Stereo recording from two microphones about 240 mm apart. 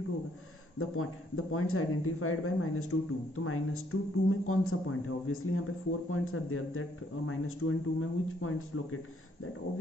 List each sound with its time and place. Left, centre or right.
0.7 s speech: left